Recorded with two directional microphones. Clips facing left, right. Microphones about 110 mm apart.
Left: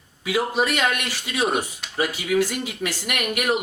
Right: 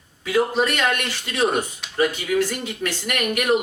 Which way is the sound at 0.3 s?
10° left (ahead or behind).